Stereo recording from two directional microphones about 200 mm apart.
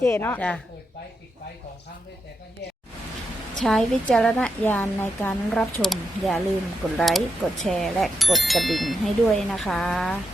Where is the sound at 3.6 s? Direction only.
5° left (ahead or behind).